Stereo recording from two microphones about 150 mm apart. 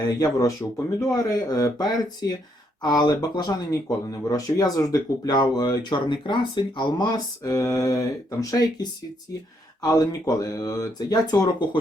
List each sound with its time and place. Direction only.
0.2 s speech: 25° left (ahead or behind)